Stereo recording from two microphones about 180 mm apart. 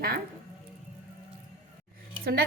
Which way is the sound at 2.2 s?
60° right (ahead or behind).